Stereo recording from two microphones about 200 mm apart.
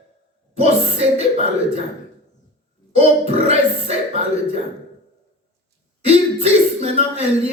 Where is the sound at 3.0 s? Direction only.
30° right (ahead or behind).